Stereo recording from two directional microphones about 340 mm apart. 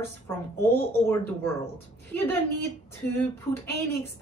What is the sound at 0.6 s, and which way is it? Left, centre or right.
Speech, centre.